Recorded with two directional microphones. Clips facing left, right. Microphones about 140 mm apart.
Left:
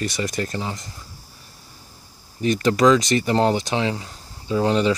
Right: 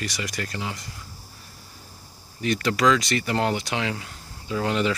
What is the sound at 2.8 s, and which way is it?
Speech, 20° left (ahead or behind).